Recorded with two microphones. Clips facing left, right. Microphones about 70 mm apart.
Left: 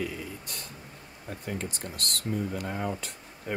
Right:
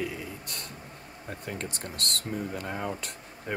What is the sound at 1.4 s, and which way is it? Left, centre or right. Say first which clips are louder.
Speech: left 2 dB; right.